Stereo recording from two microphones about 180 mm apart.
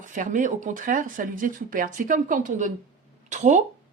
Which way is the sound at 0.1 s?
45° right (ahead or behind).